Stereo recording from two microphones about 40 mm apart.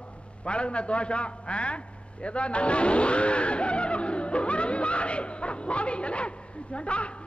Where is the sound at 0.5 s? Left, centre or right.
Left.